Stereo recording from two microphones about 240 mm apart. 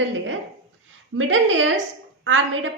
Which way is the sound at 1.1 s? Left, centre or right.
Right.